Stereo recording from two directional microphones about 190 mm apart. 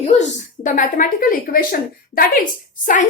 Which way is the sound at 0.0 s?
40° left (ahead or behind).